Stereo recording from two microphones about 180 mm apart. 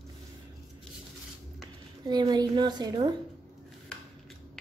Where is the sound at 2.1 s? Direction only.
25° right (ahead or behind).